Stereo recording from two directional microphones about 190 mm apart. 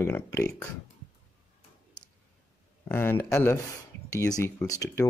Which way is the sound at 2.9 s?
10° left (ahead or behind).